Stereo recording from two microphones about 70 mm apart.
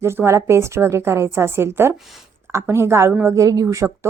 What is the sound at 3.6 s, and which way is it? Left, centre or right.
Speech, right.